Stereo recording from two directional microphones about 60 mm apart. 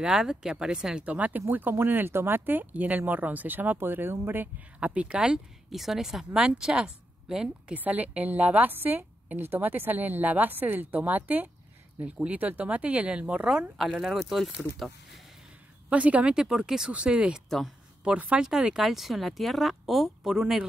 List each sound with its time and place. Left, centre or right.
0.0 s speech: centre
1.0 s a woman's voice: right
4.7 s speech: centre
7.7 s a woman's voice: right
13.8 s speech: centre
15.9 s speech: right
16.3 s speech: centre
18.4 s speech: centre